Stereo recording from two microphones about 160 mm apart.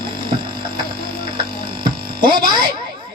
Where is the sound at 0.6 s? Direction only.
25° right (ahead or behind).